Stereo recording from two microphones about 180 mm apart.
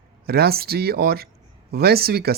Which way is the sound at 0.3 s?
60° right (ahead or behind).